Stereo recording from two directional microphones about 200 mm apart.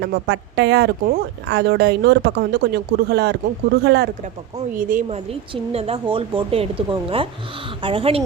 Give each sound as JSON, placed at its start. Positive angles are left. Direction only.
{"t": 0.0, "sound": "speech", "side_deg": -60}
{"t": 4.7, "sound": "a woman's voice", "side_deg": -45}
{"t": 5.0, "sound": "speech", "side_deg": -30}